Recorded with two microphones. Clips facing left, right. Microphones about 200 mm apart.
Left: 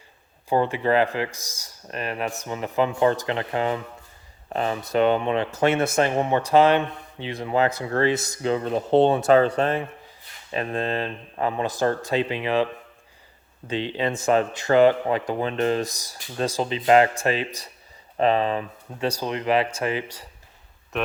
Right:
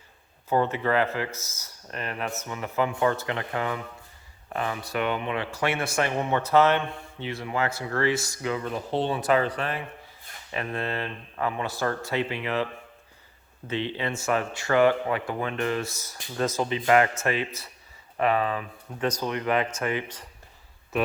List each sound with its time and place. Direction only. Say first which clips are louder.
0.5 s a man's voice: left 3 dB; 15° left (ahead or behind)
13.7 s a man's voice: left 4 dB; 15° left (ahead or behind)
16.6 s a man's voice: left 4 dB; 25° left (ahead or behind)
18.2 s a man's voice: left 4 dB; 30° left (ahead or behind)